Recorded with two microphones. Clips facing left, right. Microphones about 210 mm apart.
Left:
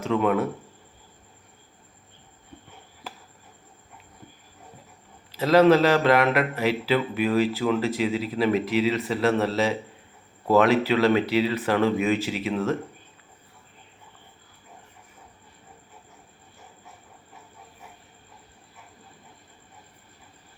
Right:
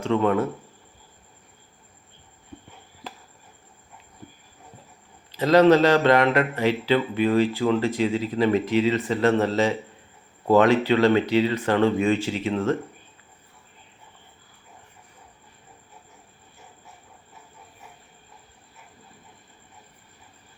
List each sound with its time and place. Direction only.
0.1 s a man's voice: 5° left (ahead or behind)
5.3 s a man's voice: 5° left (ahead or behind)